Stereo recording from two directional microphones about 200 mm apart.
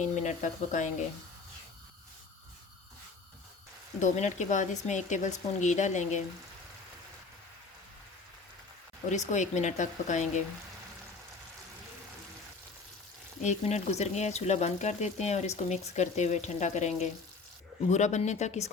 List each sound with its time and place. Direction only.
0.0 s speech: 35° left (ahead or behind)
4.0 s speech: 35° left (ahead or behind)
9.0 s speech: 35° left (ahead or behind)
13.4 s speech: 35° left (ahead or behind)